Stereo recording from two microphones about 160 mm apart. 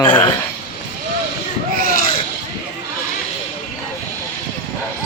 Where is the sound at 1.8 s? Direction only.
65° left (ahead or behind).